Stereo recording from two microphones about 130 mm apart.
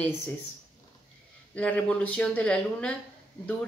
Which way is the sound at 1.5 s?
10° left (ahead or behind).